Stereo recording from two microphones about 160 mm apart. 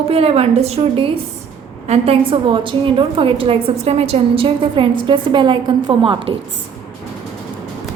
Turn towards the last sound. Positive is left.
turn(degrees=-35)  # may be behind; listen again after turning